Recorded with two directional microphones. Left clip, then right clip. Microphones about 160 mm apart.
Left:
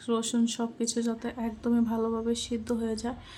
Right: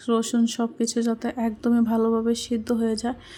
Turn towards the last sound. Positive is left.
turn(degrees=-30)  # may be behind; listen again after turning